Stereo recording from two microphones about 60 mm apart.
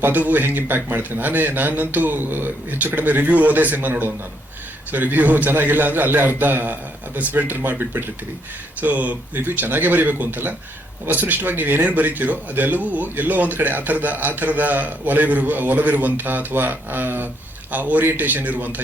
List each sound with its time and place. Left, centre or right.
0.0 s a man's voice: right